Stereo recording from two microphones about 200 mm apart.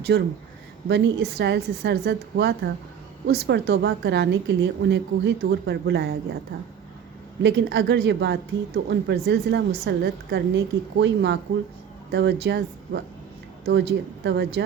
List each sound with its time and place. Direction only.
0.1 s speech: 60° right (ahead or behind)
7.4 s speech: 65° right (ahead or behind)